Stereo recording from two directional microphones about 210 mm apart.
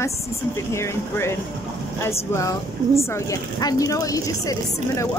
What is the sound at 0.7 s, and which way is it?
A woman's voice, 10° left (ahead or behind).